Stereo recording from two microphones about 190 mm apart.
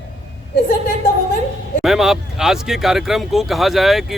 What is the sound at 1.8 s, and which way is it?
Speech, centre (ahead or behind).